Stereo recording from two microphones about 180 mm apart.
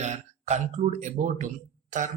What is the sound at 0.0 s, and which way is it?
Speech, 40° right (ahead or behind).